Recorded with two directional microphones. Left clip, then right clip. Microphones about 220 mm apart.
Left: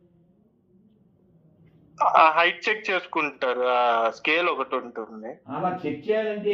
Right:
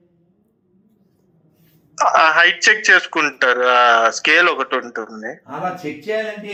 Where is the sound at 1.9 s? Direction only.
20° right (ahead or behind).